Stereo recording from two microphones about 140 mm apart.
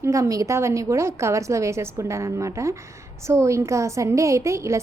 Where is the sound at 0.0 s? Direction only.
25° right (ahead or behind).